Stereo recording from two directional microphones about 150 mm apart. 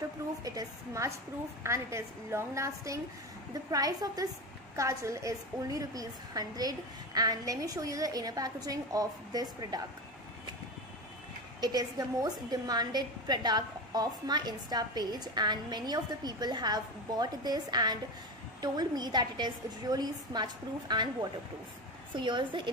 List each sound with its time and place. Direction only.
0.4 s a woman's voice: 25° right (ahead or behind)
11.6 s a woman's voice: 25° right (ahead or behind)